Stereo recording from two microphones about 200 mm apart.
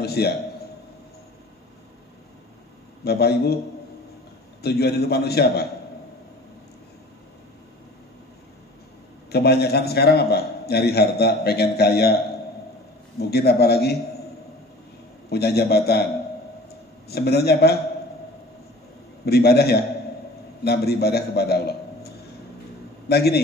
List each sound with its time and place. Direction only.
0.0 s a man's voice: 50° left (ahead or behind)
3.0 s a man's voice: 50° left (ahead or behind)
4.6 s a man's voice: 55° left (ahead or behind)
9.3 s a man's voice: 55° left (ahead or behind)
13.2 s a man's voice: 50° left (ahead or behind)
15.2 s a man's voice: 50° left (ahead or behind)
16.6 s a sound: 50° left (ahead or behind)
19.2 s a man's voice: 50° left (ahead or behind)